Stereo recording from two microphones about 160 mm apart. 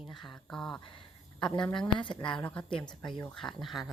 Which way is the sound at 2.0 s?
30° left (ahead or behind).